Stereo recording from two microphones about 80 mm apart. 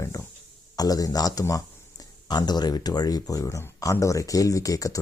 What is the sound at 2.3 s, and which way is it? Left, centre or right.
Speech, left.